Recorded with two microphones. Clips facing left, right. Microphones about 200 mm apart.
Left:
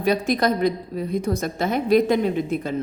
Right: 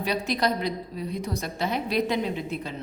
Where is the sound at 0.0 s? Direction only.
50° left (ahead or behind).